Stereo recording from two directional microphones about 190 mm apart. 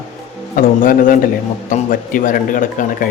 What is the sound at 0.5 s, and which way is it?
Speech, 45° left (ahead or behind).